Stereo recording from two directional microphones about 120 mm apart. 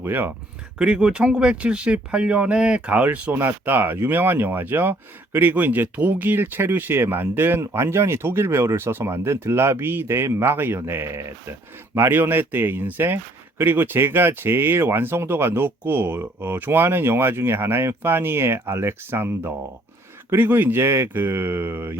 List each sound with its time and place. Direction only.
0.0 s speech: 15° right (ahead or behind)